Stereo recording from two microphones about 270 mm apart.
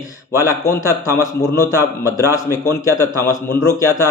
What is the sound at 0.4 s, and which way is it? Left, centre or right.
A man's voice, centre.